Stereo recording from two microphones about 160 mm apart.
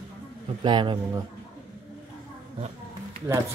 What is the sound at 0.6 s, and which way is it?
Speech, 30° right (ahead or behind).